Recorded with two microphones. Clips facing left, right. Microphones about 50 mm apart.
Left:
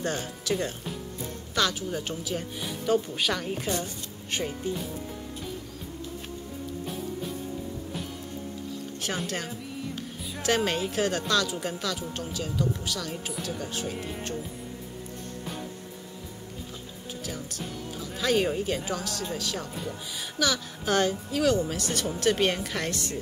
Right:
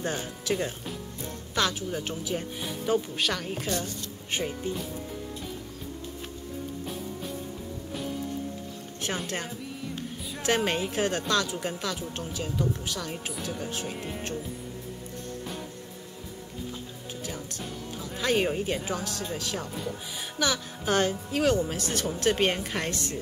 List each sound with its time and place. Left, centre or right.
0.0 s speech: centre
2.3 s speech: centre
3.6 s speech: centre
4.3 s speech: centre
10.4 s a woman's voice: centre
18.2 s a woman's voice: centre
19.6 s speech: centre
20.3 s a woman's voice: right